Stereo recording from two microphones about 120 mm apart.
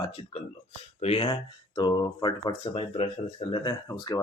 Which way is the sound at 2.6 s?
55° left (ahead or behind).